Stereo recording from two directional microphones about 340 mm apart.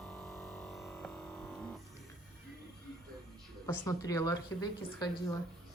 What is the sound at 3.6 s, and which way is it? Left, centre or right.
A woman's voice, centre.